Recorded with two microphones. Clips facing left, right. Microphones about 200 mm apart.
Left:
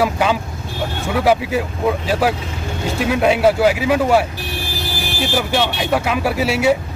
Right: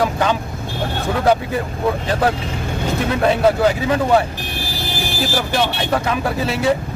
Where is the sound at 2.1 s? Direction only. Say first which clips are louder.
Even; 10° left (ahead or behind).